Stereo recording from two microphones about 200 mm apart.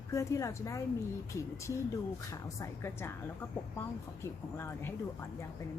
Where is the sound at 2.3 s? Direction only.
15° left (ahead or behind).